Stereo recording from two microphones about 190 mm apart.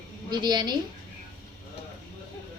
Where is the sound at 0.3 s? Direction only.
20° right (ahead or behind).